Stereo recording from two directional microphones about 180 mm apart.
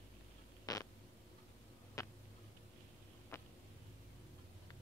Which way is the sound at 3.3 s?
15° left (ahead or behind).